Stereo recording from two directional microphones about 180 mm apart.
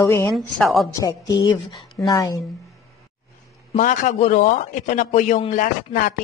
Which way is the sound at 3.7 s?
45° left (ahead or behind).